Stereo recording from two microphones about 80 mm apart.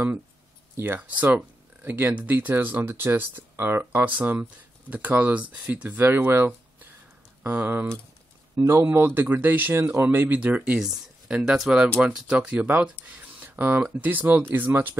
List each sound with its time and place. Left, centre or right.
0.7 s speech: right
13.0 s a sound: right
13.9 s speech: right